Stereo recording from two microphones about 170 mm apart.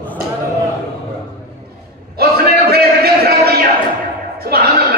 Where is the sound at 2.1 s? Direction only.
65° right (ahead or behind).